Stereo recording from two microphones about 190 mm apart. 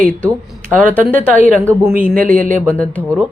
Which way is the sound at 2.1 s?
45° right (ahead or behind).